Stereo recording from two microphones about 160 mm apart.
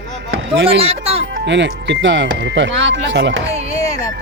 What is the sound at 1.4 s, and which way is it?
Speech, 90° right.